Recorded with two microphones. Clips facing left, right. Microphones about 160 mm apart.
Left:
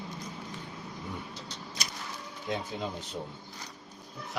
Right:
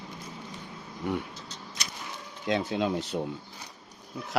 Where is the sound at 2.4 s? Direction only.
90° right.